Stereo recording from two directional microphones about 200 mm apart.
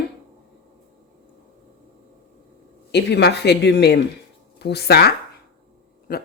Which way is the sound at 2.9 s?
55° left (ahead or behind).